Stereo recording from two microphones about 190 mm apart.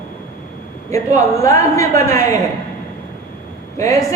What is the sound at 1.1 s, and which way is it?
Speech, 15° left (ahead or behind).